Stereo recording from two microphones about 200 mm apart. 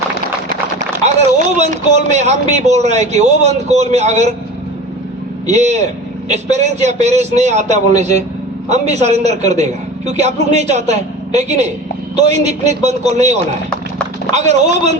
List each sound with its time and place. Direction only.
1.5 s speech: 35° right (ahead or behind)
5.5 s speech: 35° right (ahead or behind)
14.3 s speech: 35° right (ahead or behind)